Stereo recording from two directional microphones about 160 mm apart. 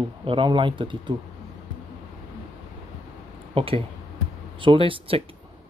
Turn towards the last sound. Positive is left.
turn(degrees=-35)  # may be behind; listen again after turning